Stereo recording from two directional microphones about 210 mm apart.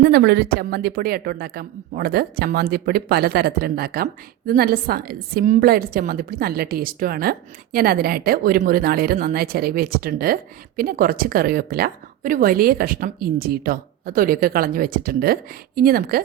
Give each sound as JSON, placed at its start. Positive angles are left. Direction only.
{"t": 0.0, "sound": "a woman's voice", "side_deg": -50}